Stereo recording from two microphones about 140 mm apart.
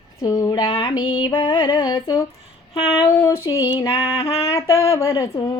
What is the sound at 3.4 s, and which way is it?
Female singing, 30° left (ahead or behind).